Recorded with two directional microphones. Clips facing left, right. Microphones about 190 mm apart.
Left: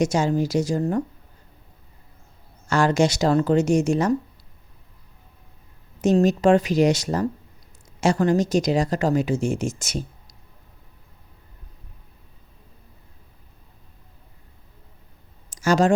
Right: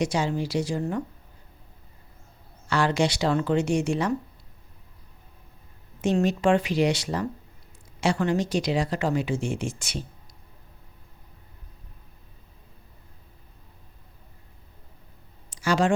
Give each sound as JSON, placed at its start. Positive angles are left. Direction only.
{"t": 0.0, "sound": "speech", "side_deg": 45}
{"t": 2.6, "sound": "speech", "side_deg": 45}
{"t": 6.0, "sound": "speech", "side_deg": 40}
{"t": 15.4, "sound": "a sound", "side_deg": 45}